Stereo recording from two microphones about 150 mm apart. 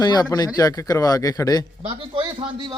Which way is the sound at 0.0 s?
25° left (ahead or behind).